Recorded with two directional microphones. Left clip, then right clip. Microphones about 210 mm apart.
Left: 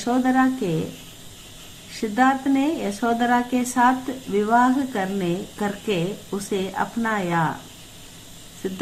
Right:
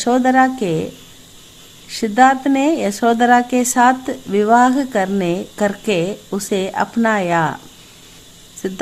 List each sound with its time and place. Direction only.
0.0 s a woman's voice: 45° right (ahead or behind)
2.0 s a woman's voice: 45° right (ahead or behind)